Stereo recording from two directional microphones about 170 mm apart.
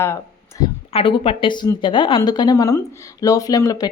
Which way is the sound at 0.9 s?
35° left (ahead or behind).